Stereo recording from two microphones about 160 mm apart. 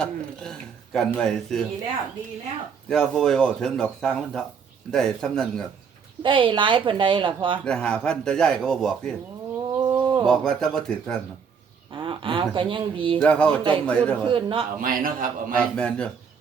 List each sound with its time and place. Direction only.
0.0 s speech: 5° left (ahead or behind)
2.9 s speech: 5° left (ahead or behind)
6.2 s a woman's voice: 30° right (ahead or behind)
7.6 s speech: 5° left (ahead or behind)
9.9 s a sound: 30° right (ahead or behind)
10.2 s speech: 5° left (ahead or behind)
11.9 s a woman's voice: 30° right (ahead or behind)
13.1 s a man's voice: 5° left (ahead or behind)
14.3 s a woman's voice: 35° right (ahead or behind)
14.8 s a man's voice: 60° right (ahead or behind)
15.5 s a man's voice: 5° left (ahead or behind)